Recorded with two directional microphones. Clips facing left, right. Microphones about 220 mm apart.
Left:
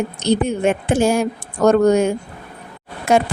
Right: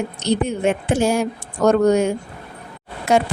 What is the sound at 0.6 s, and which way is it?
Speech, 50° left (ahead or behind).